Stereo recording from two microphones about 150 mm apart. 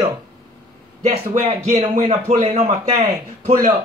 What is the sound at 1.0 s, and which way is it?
A man's voice, 45° right (ahead or behind).